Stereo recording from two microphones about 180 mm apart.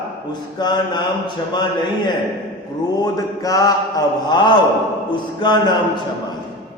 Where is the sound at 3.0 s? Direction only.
20° left (ahead or behind).